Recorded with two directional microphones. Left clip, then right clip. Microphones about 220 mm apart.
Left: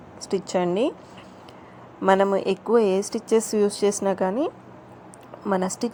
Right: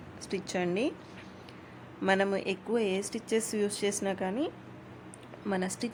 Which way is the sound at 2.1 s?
15° left (ahead or behind).